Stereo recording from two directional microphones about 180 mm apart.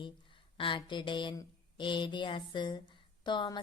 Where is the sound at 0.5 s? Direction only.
25° left (ahead or behind).